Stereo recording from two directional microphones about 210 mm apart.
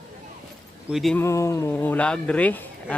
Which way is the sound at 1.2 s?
15° left (ahead or behind).